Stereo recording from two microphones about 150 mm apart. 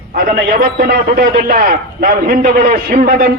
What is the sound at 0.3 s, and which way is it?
A man's voice, 70° right (ahead or behind).